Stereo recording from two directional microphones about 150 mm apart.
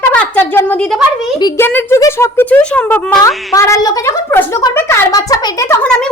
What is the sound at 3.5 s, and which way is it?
A woman's voice, 20° left (ahead or behind).